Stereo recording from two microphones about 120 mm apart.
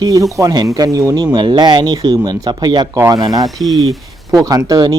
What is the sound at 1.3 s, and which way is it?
Speech, 40° right (ahead or behind).